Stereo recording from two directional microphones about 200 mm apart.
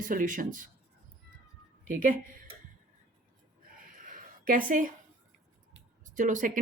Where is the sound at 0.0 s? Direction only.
45° right (ahead or behind).